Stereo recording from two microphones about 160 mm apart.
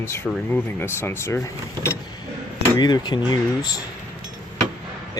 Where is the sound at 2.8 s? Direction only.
25° left (ahead or behind).